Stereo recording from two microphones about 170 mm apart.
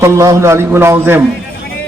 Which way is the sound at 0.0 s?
15° right (ahead or behind).